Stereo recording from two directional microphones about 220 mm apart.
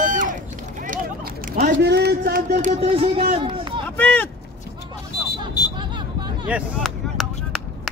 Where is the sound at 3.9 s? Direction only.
5° left (ahead or behind).